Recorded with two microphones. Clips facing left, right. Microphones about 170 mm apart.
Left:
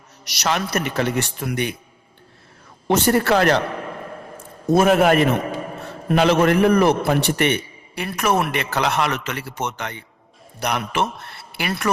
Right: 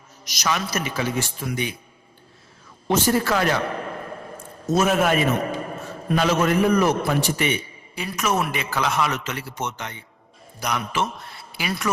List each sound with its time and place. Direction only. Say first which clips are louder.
0.3 s a man's voice: left 3 dB; 65° left (ahead or behind)
2.8 s a man's voice: left 3 dB; 65° left (ahead or behind)
4.6 s a man's voice: left 5 dB; 55° left (ahead or behind)